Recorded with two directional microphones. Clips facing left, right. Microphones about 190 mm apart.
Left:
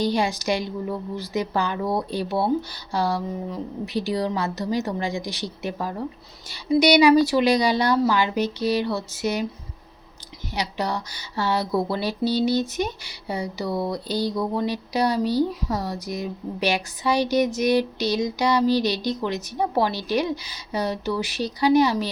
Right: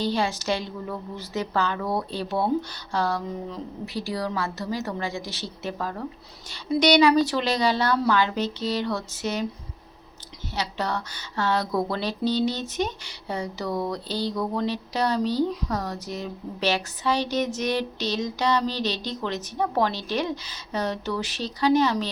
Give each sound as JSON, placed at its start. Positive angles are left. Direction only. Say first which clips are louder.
{"t": 0.0, "sound": "speech", "louder": "left 3 dB", "side_deg": 15}
{"t": 3.8, "sound": "speech", "louder": "left 4 dB", "side_deg": 20}
{"t": 10.5, "sound": "speech", "louder": "left 2 dB", "side_deg": 15}